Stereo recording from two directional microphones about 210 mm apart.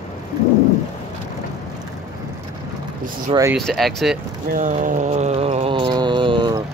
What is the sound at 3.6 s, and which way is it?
Speech, centre (ahead or behind).